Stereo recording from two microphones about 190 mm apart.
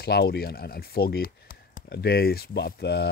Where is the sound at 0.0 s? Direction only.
55° left (ahead or behind).